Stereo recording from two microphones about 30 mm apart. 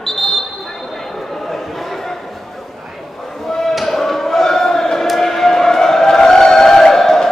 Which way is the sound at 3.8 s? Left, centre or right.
Centre.